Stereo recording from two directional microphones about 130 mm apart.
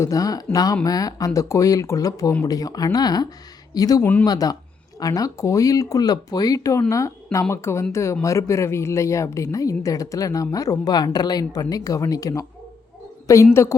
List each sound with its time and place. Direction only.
0.0 s speech: 25° left (ahead or behind)